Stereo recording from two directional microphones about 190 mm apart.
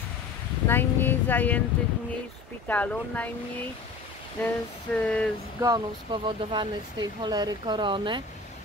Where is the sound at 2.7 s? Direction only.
10° left (ahead or behind).